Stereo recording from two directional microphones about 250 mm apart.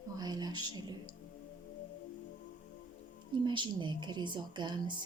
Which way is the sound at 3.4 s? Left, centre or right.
Centre.